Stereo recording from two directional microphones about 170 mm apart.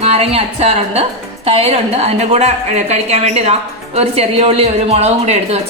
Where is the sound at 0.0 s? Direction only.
35° right (ahead or behind).